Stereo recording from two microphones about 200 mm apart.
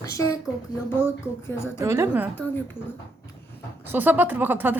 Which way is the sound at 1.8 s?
15° right (ahead or behind).